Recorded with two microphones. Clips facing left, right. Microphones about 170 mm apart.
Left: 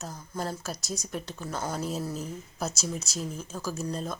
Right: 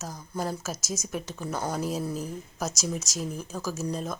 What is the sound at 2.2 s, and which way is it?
Speech, 40° right (ahead or behind).